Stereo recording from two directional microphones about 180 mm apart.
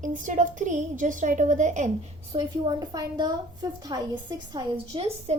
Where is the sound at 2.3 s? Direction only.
25° right (ahead or behind).